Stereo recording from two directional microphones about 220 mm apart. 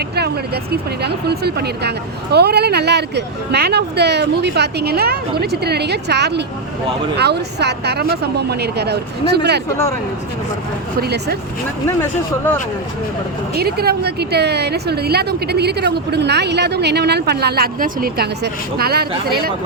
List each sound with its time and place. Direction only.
0.2 s a woman's voice: 45° right (ahead or behind)
11.0 s a woman's voice: 45° right (ahead or behind)
13.6 s a woman's voice: 45° right (ahead or behind)